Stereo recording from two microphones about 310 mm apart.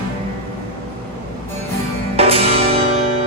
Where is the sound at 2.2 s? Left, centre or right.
Centre.